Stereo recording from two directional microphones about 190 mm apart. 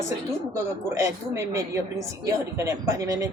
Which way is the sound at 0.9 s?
15° right (ahead or behind).